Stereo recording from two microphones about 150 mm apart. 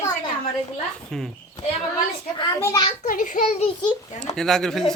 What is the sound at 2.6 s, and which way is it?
Speech, 25° left (ahead or behind).